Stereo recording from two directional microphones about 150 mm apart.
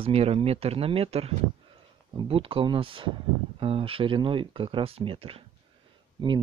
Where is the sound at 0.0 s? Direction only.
40° right (ahead or behind).